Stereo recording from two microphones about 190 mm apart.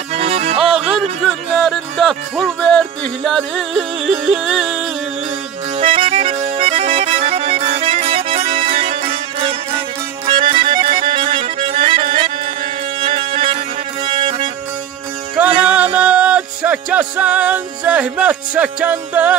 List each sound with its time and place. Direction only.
0.1 s music: 30° right (ahead or behind)
1.2 s music: 5° left (ahead or behind)
5.8 s music: 30° right (ahead or behind)
15.4 s music: 10° right (ahead or behind)